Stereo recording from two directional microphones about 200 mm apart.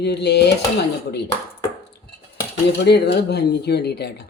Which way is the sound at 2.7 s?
55° left (ahead or behind).